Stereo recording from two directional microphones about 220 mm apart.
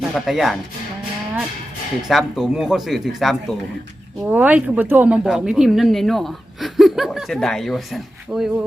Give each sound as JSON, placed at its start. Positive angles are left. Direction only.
{"t": 0.1, "sound": "speech", "side_deg": 0}
{"t": 2.0, "sound": "speech", "side_deg": 0}